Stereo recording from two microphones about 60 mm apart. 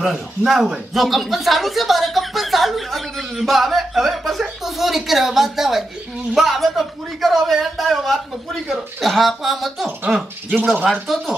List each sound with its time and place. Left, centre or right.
0.0 s speech: centre
10.6 s speech: centre
11.1 s speech: centre